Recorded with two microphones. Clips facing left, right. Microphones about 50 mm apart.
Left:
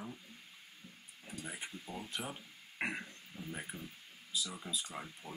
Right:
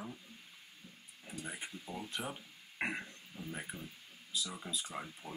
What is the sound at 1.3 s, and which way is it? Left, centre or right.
Speech, centre.